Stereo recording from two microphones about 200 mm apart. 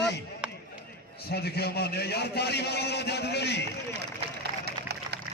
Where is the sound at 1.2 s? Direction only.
55° left (ahead or behind).